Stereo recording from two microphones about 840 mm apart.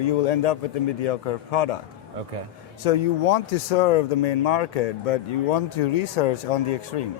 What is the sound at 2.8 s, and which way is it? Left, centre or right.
Speech, left.